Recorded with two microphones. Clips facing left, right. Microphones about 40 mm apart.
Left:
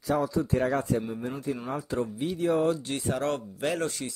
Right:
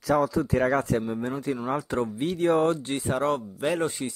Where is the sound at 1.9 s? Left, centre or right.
Right.